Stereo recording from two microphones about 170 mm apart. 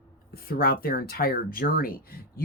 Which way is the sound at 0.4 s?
60° left (ahead or behind).